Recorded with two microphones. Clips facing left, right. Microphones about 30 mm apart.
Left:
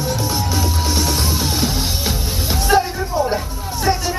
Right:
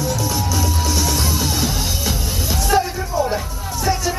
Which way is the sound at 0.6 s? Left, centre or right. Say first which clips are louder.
Left 1 dB; left.